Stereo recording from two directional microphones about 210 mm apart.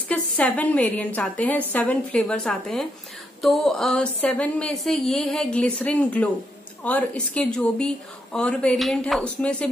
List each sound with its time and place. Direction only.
0.1 s a woman's voice: 5° left (ahead or behind)